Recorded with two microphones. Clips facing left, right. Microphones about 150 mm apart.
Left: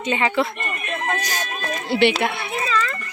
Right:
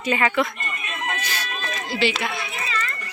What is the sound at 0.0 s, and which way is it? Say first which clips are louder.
Speech: left 1 dB; 20° left (ahead or behind).